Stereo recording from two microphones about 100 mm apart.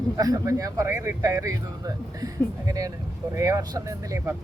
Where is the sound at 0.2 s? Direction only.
40° right (ahead or behind).